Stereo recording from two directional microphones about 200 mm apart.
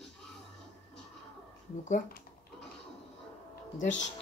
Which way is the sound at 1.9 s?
45° left (ahead or behind).